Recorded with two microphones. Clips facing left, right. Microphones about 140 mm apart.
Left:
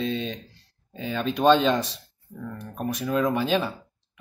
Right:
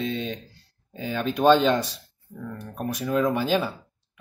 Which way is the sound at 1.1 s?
5° right (ahead or behind).